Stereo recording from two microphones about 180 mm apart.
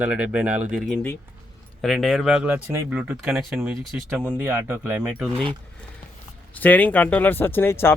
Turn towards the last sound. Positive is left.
turn(degrees=15)  # may be behind; listen again after turning